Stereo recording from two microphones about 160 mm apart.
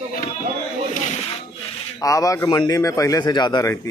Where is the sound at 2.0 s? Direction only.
20° left (ahead or behind).